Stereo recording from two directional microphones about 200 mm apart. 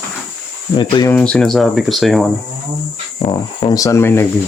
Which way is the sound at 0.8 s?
20° left (ahead or behind).